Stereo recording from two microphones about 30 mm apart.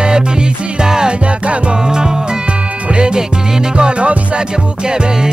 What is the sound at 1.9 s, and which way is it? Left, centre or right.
Music, right.